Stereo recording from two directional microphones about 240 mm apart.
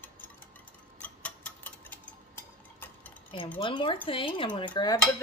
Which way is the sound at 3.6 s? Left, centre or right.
Left.